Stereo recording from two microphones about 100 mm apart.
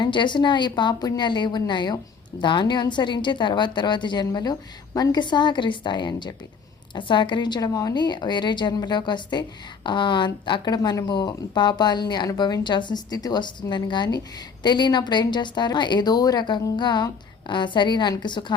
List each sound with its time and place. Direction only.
0.0 s a woman's voice: 50° left (ahead or behind)